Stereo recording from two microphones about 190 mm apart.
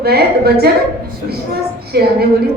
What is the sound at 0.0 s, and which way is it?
Speech, 55° right (ahead or behind).